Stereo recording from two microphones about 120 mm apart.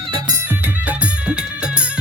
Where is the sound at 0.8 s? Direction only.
10° right (ahead or behind).